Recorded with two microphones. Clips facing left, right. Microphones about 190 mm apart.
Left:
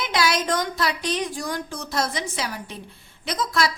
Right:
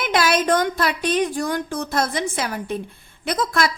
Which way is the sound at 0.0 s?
55° right (ahead or behind).